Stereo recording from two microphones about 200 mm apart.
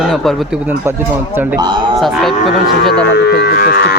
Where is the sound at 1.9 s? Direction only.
Centre (ahead or behind).